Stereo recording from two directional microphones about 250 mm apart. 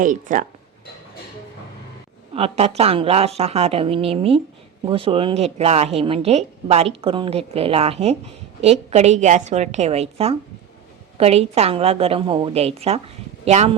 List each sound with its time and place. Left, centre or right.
0.0 s speech: right
2.3 s a woman's voice: right